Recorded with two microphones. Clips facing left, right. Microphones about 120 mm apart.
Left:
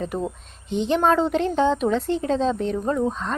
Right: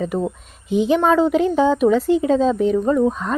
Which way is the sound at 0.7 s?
5° right (ahead or behind).